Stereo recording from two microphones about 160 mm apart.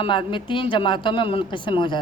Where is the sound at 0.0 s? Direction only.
30° left (ahead or behind).